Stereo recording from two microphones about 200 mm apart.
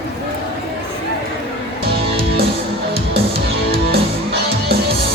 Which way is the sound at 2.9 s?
50° right (ahead or behind).